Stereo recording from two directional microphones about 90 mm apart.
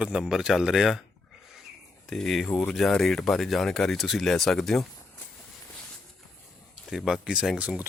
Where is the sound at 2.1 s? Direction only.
5° left (ahead or behind).